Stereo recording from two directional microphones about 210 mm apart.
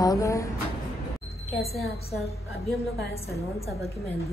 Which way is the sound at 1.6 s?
50° left (ahead or behind).